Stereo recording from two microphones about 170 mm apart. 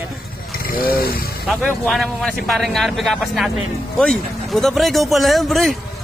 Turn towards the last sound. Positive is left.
turn(degrees=0)  # may be behind; listen again after turning